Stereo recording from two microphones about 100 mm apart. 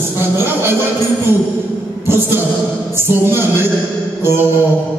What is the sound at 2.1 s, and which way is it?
Music, 25° right (ahead or behind).